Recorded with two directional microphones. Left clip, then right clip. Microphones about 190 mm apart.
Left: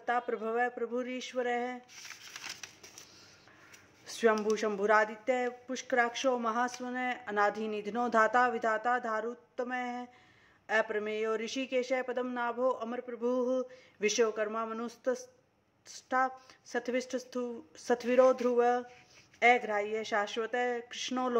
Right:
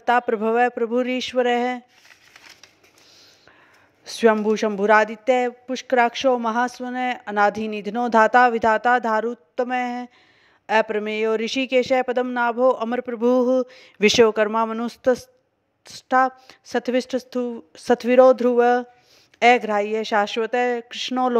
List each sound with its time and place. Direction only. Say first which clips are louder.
0.0 s speech: right 13 dB; 50° right (ahead or behind)
4.0 s a man's voice: right 10 dB; 40° right (ahead or behind)